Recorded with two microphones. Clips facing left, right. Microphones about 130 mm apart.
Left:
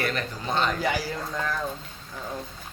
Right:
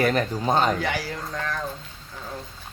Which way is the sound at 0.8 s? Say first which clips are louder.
Left 1 dB; 5° left (ahead or behind).